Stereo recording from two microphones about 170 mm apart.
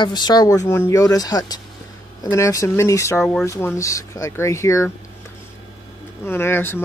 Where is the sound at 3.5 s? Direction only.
15° left (ahead or behind).